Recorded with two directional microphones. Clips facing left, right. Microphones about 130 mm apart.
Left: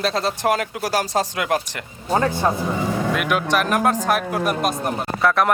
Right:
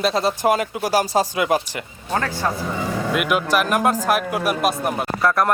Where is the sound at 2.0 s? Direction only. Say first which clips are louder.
Left 4 dB; 20° left (ahead or behind).